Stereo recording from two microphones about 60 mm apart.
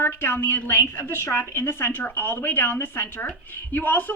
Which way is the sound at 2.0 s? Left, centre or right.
Left.